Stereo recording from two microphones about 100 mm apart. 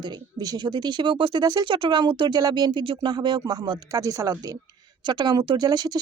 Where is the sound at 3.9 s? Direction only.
35° right (ahead or behind).